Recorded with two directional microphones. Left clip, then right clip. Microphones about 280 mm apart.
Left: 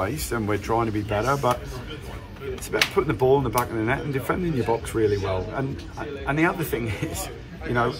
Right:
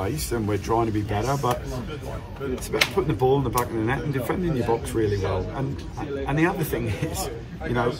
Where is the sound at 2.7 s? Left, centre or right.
Centre.